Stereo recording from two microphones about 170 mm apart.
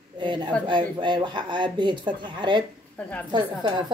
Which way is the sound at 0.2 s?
25° right (ahead or behind).